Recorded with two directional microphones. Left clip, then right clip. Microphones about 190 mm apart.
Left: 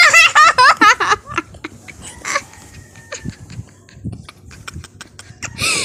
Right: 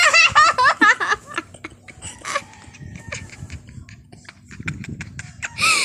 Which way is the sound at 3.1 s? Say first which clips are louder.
Left 3 dB; 5° right (ahead or behind).